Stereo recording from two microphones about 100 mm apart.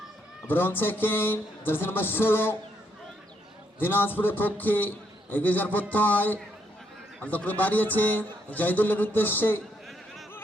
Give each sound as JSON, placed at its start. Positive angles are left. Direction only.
{"t": 0.4, "sound": "a man's voice", "side_deg": 20}
{"t": 3.8, "sound": "a man's voice", "side_deg": 20}